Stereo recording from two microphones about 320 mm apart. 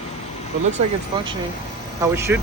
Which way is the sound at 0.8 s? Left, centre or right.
Centre.